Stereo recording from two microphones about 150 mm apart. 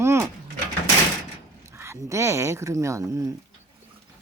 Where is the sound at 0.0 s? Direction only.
15° right (ahead or behind).